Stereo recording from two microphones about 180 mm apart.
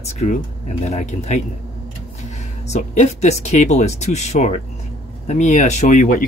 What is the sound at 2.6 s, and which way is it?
Speech, 40° left (ahead or behind).